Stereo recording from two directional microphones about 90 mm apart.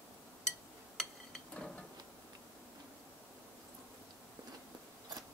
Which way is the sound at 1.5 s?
10° left (ahead or behind).